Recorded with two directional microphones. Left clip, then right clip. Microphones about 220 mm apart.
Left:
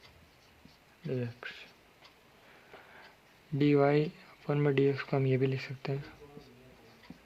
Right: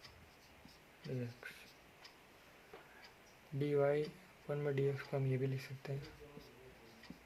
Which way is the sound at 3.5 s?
50° left (ahead or behind).